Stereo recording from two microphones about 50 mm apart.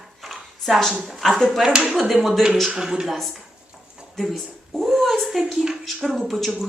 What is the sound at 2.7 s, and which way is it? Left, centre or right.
Speech, centre.